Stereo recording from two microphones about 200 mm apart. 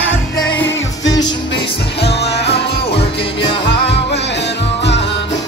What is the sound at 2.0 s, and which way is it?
Music, 55° left (ahead or behind).